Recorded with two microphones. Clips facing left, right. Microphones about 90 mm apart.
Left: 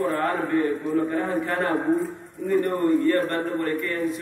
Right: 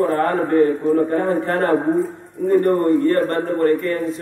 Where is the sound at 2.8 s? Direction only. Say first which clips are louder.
Right 4 dB; 50° right (ahead or behind).